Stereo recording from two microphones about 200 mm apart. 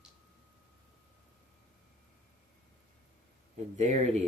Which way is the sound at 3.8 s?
35° right (ahead or behind).